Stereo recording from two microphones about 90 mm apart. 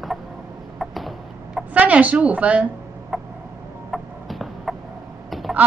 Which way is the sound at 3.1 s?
Centre (ahead or behind).